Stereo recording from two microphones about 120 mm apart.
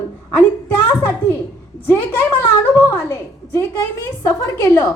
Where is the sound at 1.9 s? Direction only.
20° left (ahead or behind).